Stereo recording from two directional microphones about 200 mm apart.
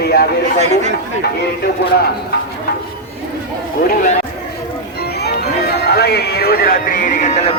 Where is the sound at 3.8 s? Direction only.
45° left (ahead or behind).